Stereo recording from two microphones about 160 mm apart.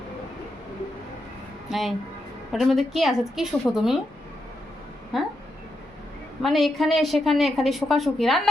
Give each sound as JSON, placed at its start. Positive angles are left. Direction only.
{"t": 1.7, "sound": "a woman's voice", "side_deg": 0}
{"t": 5.1, "sound": "a woman's voice", "side_deg": 0}
{"t": 6.4, "sound": "a woman's voice", "side_deg": 0}